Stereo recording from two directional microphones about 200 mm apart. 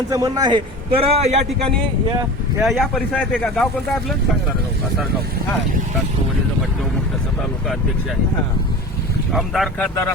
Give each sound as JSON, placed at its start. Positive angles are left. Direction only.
{"t": 0.1, "sound": "a man's voice", "side_deg": -20}
{"t": 2.6, "sound": "speech", "side_deg": 0}
{"t": 9.3, "sound": "speech", "side_deg": 0}